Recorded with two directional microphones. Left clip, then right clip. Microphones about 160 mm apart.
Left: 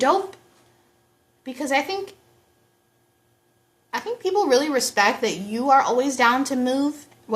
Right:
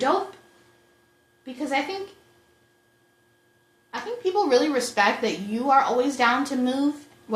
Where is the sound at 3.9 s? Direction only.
25° left (ahead or behind).